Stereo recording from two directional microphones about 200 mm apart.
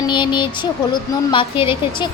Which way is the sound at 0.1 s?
25° left (ahead or behind).